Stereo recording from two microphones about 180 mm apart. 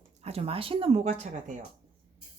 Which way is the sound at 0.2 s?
35° right (ahead or behind).